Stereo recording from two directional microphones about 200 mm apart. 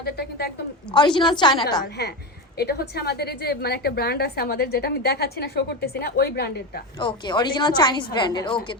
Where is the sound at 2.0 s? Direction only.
55° left (ahead or behind).